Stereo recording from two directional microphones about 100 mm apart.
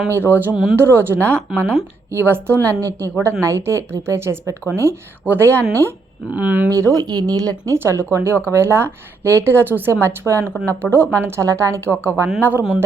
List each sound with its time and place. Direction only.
0.1 s a woman's voice: 20° right (ahead or behind)
0.5 s speech: 5° right (ahead or behind)
0.8 s a woman's voice: 25° right (ahead or behind)
6.3 s speech: 15° right (ahead or behind)
6.7 s a woman's voice: 35° right (ahead or behind); by 12.8 s 15° right (ahead or behind)